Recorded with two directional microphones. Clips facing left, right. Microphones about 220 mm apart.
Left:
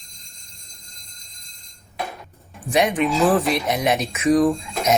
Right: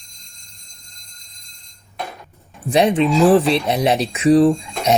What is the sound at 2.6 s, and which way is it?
Speech, 30° right (ahead or behind).